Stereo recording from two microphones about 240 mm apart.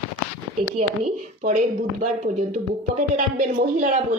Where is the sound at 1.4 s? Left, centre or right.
Right.